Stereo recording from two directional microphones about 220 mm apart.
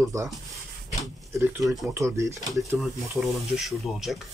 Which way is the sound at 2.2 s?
15° right (ahead or behind).